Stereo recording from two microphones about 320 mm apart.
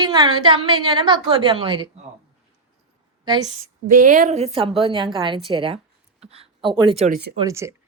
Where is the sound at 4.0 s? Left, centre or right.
Right.